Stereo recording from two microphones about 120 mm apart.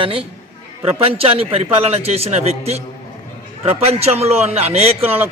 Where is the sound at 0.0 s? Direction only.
50° right (ahead or behind).